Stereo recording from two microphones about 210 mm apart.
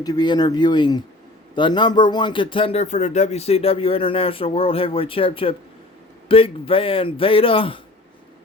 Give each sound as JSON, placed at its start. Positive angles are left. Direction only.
{"t": 0.0, "sound": "a man's voice", "side_deg": 20}